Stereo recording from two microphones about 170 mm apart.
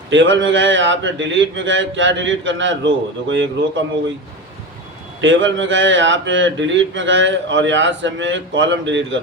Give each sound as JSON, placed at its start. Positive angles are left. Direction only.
{"t": 0.1, "sound": "speech", "side_deg": -90}
{"t": 5.2, "sound": "speech", "side_deg": -90}